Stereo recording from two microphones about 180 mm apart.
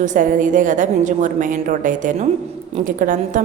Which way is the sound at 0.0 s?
45° right (ahead or behind).